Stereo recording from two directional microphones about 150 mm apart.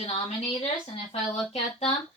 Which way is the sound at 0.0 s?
40° left (ahead or behind).